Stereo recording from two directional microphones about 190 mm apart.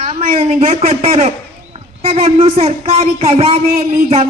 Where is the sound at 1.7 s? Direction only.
30° right (ahead or behind).